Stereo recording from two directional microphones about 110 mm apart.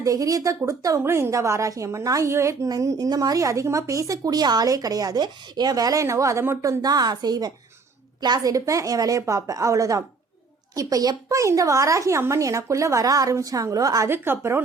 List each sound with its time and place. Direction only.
0.0 s a woman's voice: 30° right (ahead or behind)
14.1 s speech: 20° right (ahead or behind)